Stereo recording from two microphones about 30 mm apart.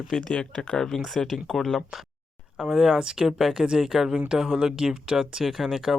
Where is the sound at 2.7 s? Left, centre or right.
Centre.